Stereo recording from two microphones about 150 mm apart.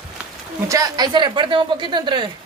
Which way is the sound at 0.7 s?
25° right (ahead or behind).